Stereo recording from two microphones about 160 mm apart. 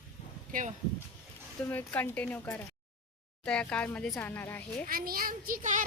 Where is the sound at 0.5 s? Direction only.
60° right (ahead or behind).